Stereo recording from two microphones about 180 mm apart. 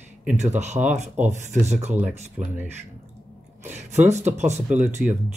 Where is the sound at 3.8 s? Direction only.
40° right (ahead or behind).